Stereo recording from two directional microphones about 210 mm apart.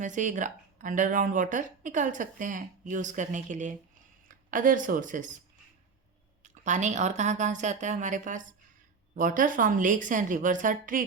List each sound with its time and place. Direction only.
0.0 s a woman's voice: 35° right (ahead or behind)
6.4 s speech: 35° right (ahead or behind)